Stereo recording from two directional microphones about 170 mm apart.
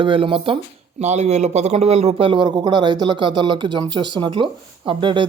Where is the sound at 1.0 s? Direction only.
40° right (ahead or behind).